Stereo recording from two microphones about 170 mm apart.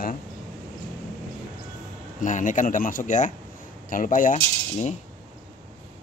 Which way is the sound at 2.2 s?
50° left (ahead or behind).